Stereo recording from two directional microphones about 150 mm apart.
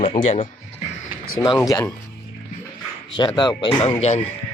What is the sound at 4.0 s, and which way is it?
Speech, 45° left (ahead or behind).